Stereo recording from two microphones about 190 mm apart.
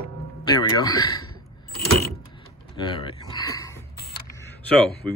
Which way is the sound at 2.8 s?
25° left (ahead or behind).